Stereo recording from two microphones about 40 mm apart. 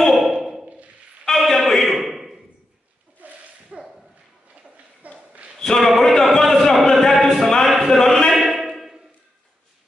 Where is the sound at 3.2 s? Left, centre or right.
Right.